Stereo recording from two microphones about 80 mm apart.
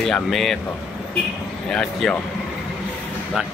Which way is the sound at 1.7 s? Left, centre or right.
Centre.